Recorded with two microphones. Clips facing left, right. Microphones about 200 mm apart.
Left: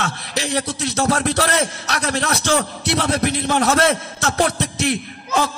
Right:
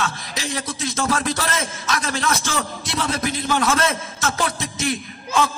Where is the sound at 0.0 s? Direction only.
70° left (ahead or behind).